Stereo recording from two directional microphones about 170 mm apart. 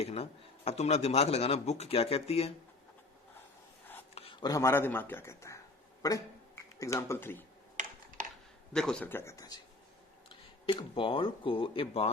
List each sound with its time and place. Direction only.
0.0 s speech: 35° left (ahead or behind)
4.1 s speech: 30° left (ahead or behind); by 7.4 s 15° left (ahead or behind)
8.7 s speech: 5° left (ahead or behind); by 12.1 s 35° left (ahead or behind)